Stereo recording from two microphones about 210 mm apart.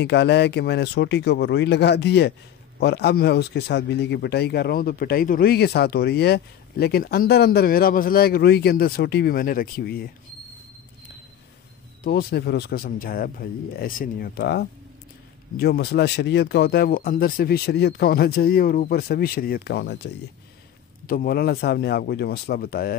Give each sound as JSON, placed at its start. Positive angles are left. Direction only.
{"t": 0.0, "sound": "a man's voice", "side_deg": 55}
{"t": 12.0, "sound": "a man's voice", "side_deg": 45}
{"t": 21.1, "sound": "a man's voice", "side_deg": 45}